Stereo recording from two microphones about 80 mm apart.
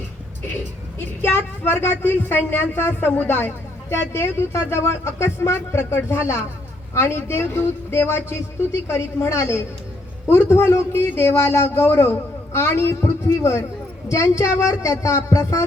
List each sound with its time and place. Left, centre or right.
0.9 s speech: left